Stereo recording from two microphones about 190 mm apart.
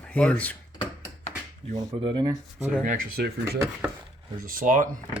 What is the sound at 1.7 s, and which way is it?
Speech, 20° right (ahead or behind).